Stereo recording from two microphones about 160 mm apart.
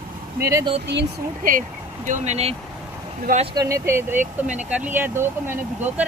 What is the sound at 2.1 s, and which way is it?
Speech, 45° right (ahead or behind).